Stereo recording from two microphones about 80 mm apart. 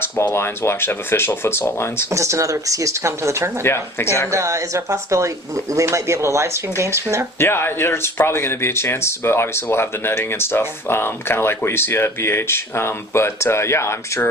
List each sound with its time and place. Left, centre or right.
0.3 s speech: left
2.0 s speech: right
3.6 s speech: left
4.3 s speech: right
7.3 s speech: left